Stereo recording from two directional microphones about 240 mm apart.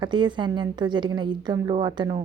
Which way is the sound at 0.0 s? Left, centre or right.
Centre.